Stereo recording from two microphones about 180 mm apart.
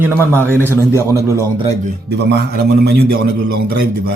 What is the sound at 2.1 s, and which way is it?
A man's voice, 65° right (ahead or behind).